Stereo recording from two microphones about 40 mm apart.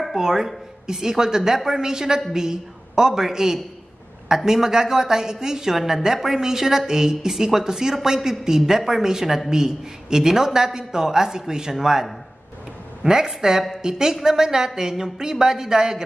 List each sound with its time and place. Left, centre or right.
0.1 s a woman's voice: centre